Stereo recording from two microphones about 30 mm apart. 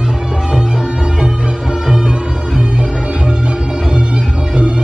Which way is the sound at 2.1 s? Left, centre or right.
Right.